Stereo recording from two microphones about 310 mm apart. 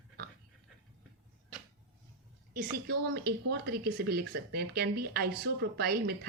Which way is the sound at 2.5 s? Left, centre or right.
Right.